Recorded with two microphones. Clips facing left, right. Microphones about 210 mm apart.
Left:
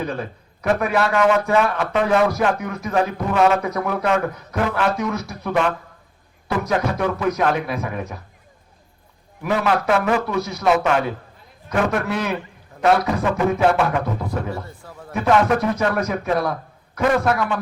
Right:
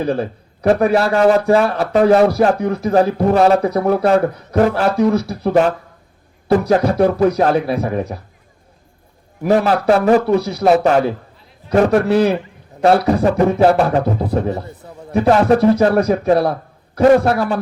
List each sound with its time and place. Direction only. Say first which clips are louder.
0.0 s a man's voice: right 7 dB; 35° right (ahead or behind)
9.4 s a man's voice: right 6 dB; 35° right (ahead or behind)
14.5 s a man's voice: right 5 dB; 20° right (ahead or behind)
15.1 s a man's voice: right 5 dB; 35° right (ahead or behind)